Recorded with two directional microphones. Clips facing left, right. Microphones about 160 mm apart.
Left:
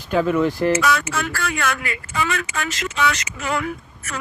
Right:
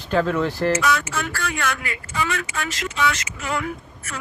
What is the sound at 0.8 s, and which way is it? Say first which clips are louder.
A woman's voice: left 1 dB; 90° left.